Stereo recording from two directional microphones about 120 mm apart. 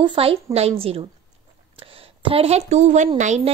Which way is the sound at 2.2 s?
50° right (ahead or behind).